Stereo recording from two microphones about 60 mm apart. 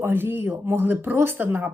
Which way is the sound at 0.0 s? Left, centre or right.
Right.